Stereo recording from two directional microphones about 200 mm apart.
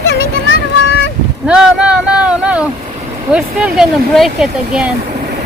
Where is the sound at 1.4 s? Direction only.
5° right (ahead or behind).